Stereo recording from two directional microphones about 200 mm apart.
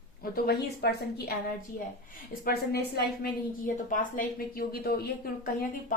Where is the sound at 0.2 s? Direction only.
50° left (ahead or behind).